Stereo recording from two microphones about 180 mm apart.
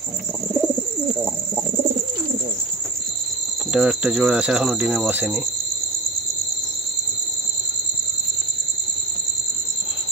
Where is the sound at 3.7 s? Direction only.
5° right (ahead or behind).